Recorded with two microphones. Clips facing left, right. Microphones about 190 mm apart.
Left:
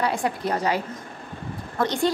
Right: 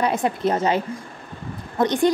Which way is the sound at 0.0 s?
20° right (ahead or behind).